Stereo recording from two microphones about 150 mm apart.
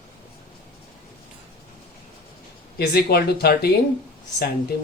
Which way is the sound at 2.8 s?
90° left.